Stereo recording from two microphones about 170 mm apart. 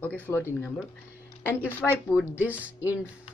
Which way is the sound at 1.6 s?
10° right (ahead or behind).